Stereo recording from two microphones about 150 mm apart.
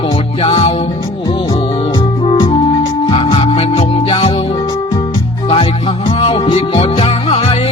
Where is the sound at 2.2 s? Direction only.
35° left (ahead or behind).